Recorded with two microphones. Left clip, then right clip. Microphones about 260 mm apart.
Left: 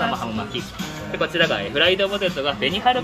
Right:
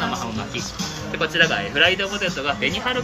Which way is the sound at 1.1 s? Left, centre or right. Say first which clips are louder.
Right 1 dB; left.